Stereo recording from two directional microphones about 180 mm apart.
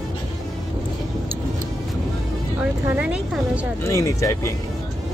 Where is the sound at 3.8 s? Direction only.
15° left (ahead or behind).